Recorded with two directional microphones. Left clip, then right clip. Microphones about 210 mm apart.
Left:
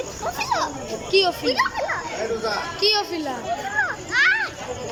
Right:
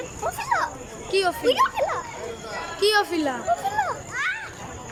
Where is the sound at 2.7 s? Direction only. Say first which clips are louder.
Right 3 dB; 5° left (ahead or behind).